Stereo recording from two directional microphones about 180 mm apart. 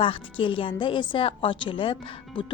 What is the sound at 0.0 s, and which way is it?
A woman's voice, 30° left (ahead or behind).